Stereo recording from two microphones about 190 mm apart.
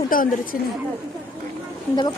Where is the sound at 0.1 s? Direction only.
50° left (ahead or behind).